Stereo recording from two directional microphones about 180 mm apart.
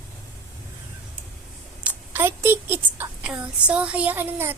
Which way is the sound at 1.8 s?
10° right (ahead or behind).